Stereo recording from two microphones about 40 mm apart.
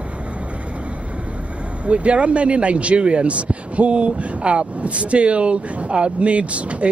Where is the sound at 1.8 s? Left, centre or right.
Right.